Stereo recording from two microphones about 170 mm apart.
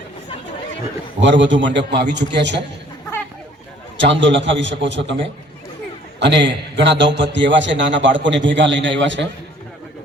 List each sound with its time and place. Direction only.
1.2 s a man's voice: 90° right
3.9 s a man's voice: 90° right
6.1 s a man's voice: 90° right